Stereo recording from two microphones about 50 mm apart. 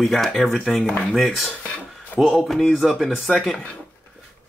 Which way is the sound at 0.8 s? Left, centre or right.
Left.